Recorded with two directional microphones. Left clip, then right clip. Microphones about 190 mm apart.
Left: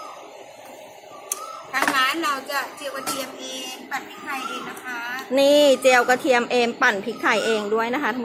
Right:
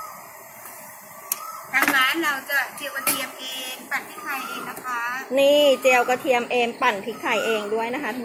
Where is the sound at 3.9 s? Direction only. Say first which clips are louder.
Right 2 dB; 20° left (ahead or behind).